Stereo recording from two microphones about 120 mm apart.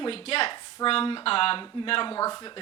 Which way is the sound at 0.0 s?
50° left (ahead or behind).